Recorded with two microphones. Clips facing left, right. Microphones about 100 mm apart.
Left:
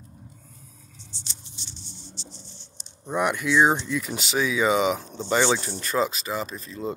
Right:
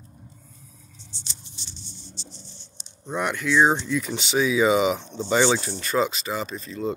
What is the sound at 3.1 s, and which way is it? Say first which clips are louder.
Speech: left 1 dB; 10° left (ahead or behind).